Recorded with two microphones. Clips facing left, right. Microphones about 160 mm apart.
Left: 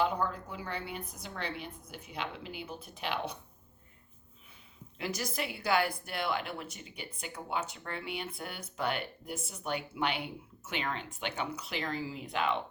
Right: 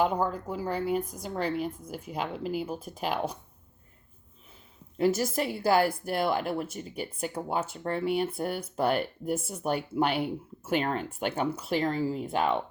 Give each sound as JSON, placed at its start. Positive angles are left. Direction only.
{"t": 0.0, "sound": "a woman's voice", "side_deg": -45}
{"t": 4.9, "sound": "a woman's voice", "side_deg": -45}